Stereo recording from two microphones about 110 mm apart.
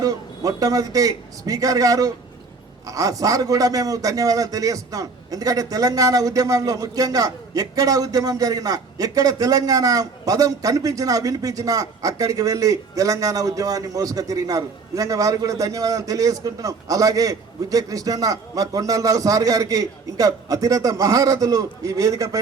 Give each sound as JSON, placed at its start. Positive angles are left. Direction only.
{"t": 0.0, "sound": "a man's voice", "side_deg": -35}